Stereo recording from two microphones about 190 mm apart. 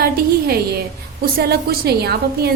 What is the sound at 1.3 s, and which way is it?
A woman's voice, 55° right (ahead or behind).